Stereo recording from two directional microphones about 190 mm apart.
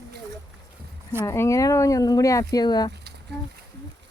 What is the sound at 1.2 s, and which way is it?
Speech, 15° left (ahead or behind).